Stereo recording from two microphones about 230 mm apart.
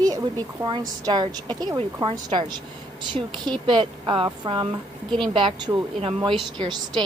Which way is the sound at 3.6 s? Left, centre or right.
Right.